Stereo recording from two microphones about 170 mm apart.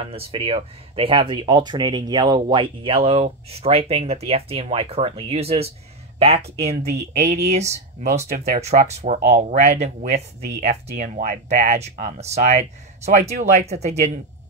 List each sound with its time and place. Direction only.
0.0 s speech: 35° right (ahead or behind)
11.2 s speech: 40° right (ahead or behind)